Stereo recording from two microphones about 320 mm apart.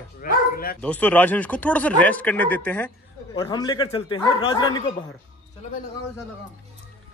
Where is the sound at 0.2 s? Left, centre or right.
Left.